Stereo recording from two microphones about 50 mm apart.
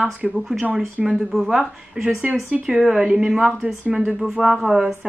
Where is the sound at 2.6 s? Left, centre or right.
Centre.